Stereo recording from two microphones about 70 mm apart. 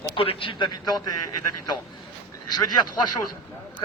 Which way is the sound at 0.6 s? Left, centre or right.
Left.